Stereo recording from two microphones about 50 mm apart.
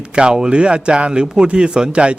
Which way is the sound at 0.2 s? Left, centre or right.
Centre.